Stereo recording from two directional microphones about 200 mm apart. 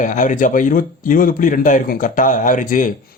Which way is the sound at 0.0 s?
40° left (ahead or behind).